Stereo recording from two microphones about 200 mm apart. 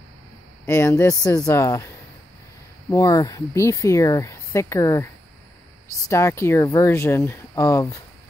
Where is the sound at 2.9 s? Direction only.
15° left (ahead or behind).